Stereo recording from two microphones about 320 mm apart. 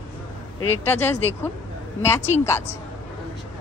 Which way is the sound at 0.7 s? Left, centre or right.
Centre.